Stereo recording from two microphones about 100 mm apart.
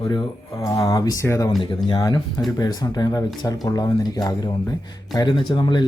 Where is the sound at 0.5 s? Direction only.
35° left (ahead or behind).